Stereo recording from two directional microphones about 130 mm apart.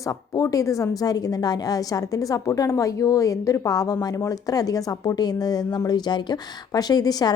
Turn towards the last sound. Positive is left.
turn(degrees=30)  # may be behind; listen again after turning